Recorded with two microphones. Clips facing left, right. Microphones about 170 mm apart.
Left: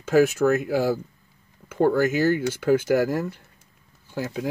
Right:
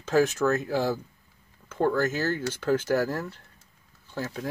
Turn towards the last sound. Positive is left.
turn(degrees=10)  # may be behind; listen again after turning